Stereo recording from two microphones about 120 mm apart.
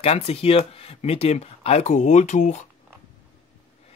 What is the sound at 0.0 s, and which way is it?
Speech, 60° left (ahead or behind).